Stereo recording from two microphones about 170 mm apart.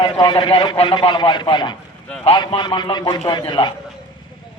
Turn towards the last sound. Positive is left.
turn(degrees=25)  # may be behind; listen again after turning